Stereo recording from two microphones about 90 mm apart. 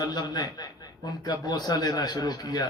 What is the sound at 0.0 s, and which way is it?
A man's voice, 50° left (ahead or behind).